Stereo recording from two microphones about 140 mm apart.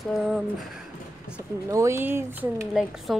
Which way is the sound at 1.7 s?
20° right (ahead or behind).